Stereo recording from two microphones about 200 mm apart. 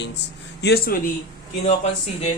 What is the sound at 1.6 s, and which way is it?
Speech, 30° left (ahead or behind).